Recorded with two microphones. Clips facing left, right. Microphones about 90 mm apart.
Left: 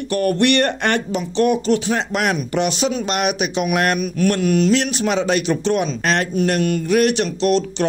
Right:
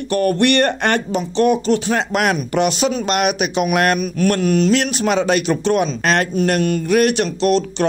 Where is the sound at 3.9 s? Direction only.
45° right (ahead or behind).